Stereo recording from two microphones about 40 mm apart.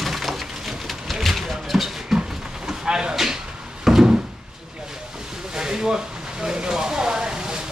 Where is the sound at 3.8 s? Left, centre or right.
Centre.